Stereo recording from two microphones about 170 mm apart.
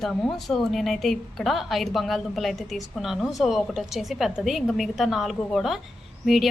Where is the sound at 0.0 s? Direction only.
Centre (ahead or behind).